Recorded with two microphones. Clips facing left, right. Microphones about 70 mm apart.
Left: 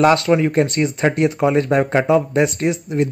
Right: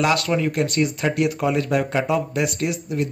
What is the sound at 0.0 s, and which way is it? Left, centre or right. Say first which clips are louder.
Speech: left 6 dB; left.